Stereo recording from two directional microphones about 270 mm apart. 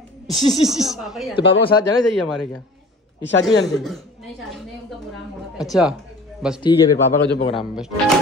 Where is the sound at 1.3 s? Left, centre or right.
Centre.